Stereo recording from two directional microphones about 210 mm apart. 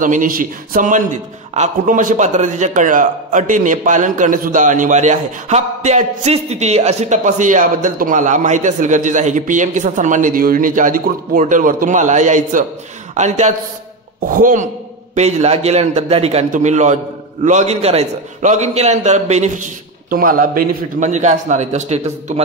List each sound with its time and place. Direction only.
0.0 s a man's voice: 40° right (ahead or behind)